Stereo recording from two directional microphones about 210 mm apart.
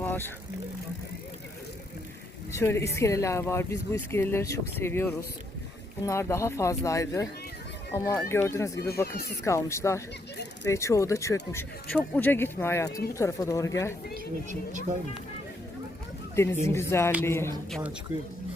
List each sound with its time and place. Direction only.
0.0 s vehicle: 10° left (ahead or behind)
2.5 s speech: 10° left (ahead or behind)
14.7 s speech: 35° right (ahead or behind)
16.3 s speech: 10° left (ahead or behind)